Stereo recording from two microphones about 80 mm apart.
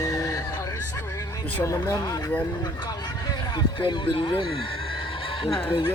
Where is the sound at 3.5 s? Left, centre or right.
Left.